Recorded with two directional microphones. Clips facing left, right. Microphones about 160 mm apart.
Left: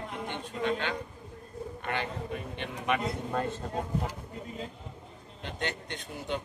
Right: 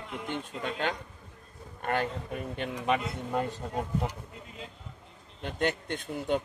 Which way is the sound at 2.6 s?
30° right (ahead or behind).